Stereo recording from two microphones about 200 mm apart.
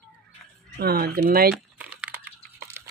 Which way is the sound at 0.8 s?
50° right (ahead or behind).